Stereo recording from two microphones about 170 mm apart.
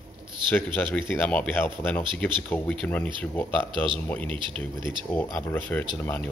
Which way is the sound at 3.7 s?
30° right (ahead or behind).